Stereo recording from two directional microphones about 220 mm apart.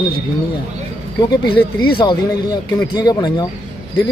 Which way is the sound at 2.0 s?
20° left (ahead or behind).